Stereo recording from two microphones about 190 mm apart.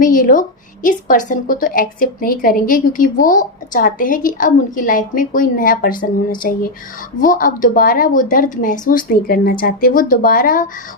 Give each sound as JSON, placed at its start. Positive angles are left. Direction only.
{"t": 0.0, "sound": "a woman's voice", "side_deg": 45}